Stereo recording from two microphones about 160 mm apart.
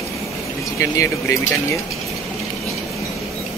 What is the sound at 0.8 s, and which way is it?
Speech, 15° left (ahead or behind).